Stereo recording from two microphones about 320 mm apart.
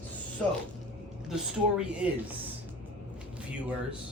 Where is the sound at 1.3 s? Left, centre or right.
Centre.